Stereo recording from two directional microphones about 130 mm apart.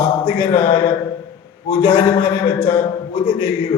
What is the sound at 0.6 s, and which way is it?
A man's voice, 45° left (ahead or behind).